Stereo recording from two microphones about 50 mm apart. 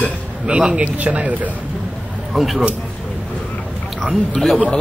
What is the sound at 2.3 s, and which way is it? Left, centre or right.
Speech, centre.